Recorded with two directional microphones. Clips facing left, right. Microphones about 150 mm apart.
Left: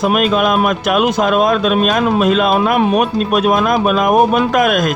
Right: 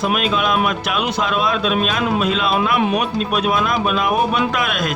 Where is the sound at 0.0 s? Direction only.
45° left (ahead or behind).